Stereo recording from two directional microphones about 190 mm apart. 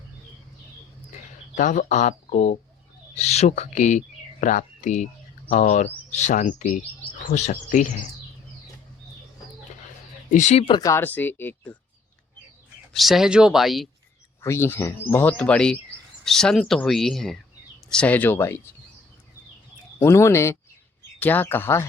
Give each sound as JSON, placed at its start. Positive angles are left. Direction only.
{"t": 1.5, "sound": "speech", "side_deg": 40}
{"t": 10.3, "sound": "speech", "side_deg": 35}
{"t": 12.9, "sound": "speech", "side_deg": 0}
{"t": 14.4, "sound": "speech", "side_deg": 15}
{"t": 20.0, "sound": "speech", "side_deg": 15}